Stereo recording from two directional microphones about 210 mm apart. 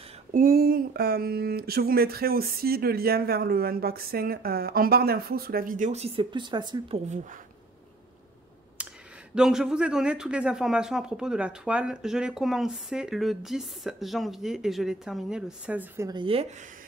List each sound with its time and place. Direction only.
0.3 s speech: 45° right (ahead or behind); by 7.0 s 20° right (ahead or behind)
8.8 s a sound: 5° right (ahead or behind)
9.3 s speech: 5° right (ahead or behind)
16.1 s speech: 25° right (ahead or behind)